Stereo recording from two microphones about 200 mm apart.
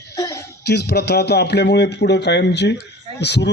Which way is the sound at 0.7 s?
55° left (ahead or behind).